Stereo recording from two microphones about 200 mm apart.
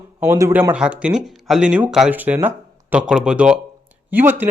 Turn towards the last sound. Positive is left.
turn(degrees=-10)  # may be behind; listen again after turning